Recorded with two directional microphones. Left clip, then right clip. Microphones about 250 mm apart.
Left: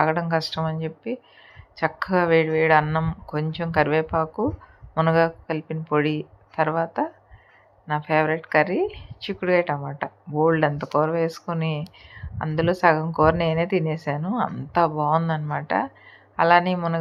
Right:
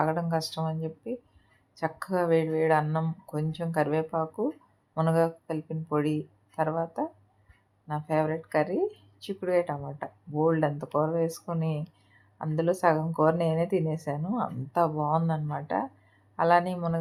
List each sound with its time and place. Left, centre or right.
0.0 s speech: centre